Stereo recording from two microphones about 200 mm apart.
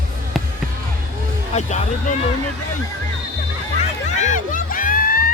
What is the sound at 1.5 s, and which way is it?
Speech, 35° left (ahead or behind).